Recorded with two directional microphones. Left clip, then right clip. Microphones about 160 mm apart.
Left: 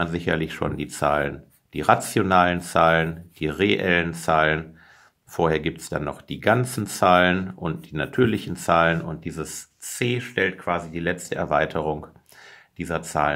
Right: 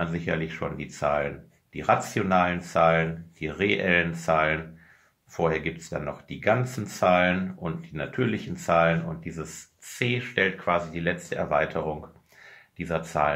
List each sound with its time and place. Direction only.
0.0 s speech: 40° left (ahead or behind)